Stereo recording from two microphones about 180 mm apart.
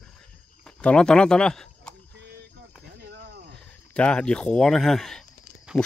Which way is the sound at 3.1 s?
65° right (ahead or behind).